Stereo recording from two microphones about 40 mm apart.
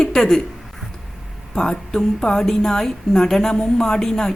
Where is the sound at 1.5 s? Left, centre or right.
Centre.